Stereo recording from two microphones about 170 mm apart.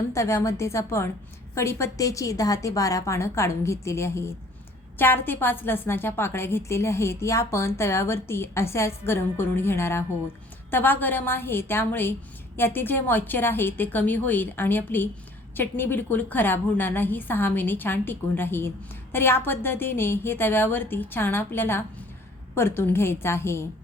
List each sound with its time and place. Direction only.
0.1 s a woman's voice: 15° left (ahead or behind)